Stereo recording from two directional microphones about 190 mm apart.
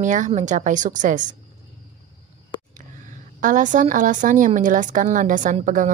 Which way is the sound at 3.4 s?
40° right (ahead or behind).